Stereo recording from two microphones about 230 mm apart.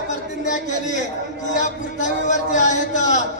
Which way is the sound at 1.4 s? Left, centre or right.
Left.